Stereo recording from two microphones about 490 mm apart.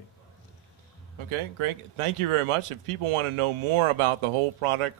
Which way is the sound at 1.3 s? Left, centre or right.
Right.